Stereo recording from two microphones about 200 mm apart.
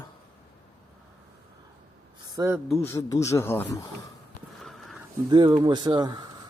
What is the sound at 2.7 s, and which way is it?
Speech, 15° left (ahead or behind).